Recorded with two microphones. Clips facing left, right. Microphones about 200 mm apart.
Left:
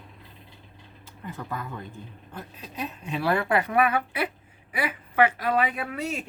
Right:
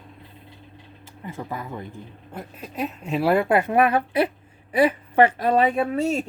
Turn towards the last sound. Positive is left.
turn(degrees=-30)  # may be behind; listen again after turning